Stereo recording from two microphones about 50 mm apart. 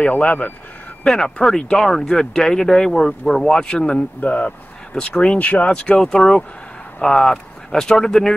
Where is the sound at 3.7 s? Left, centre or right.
Left.